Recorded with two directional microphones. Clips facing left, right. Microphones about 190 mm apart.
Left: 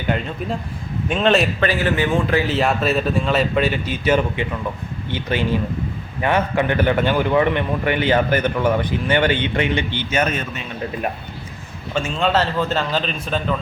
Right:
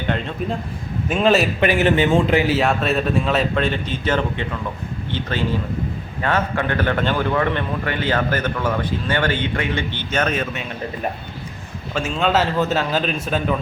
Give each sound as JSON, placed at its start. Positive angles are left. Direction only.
{"t": 1.0, "sound": "a man's voice", "side_deg": -5}
{"t": 1.6, "sound": "a man's voice", "side_deg": -20}
{"t": 2.6, "sound": "a man's voice", "side_deg": 0}
{"t": 6.2, "sound": "a man's voice", "side_deg": 15}
{"t": 10.1, "sound": "a man's voice", "side_deg": 5}
{"t": 11.9, "sound": "a man's voice", "side_deg": 0}